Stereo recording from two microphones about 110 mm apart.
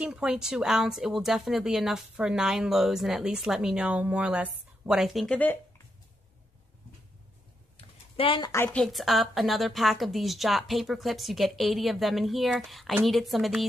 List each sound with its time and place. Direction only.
0.0 s speech: 5° right (ahead or behind)
5.3 s speech: 15° left (ahead or behind)
7.7 s typing: 55° left (ahead or behind)
8.4 s a woman's voice: 25° left (ahead or behind)
8.6 s speech: 5° left (ahead or behind)